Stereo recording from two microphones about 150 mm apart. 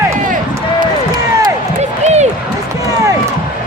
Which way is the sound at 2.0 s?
50° right (ahead or behind).